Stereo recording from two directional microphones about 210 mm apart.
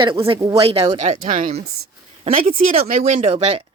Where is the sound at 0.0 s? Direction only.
25° right (ahead or behind).